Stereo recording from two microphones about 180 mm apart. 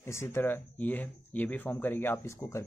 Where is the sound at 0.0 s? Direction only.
15° left (ahead or behind).